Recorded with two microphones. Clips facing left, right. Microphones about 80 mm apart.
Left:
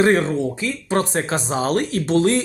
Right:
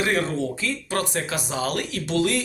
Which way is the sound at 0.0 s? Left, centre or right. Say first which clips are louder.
Left 7 dB; left.